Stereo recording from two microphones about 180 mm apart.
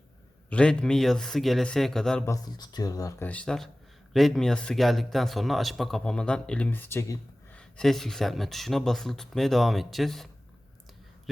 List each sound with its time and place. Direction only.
0.5 s speech: 5° left (ahead or behind)
2.2 s speech: 20° left (ahead or behind); by 10.2 s centre (ahead or behind)